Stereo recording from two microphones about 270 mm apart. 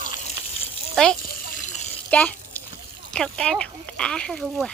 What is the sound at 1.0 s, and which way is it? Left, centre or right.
Speech, centre.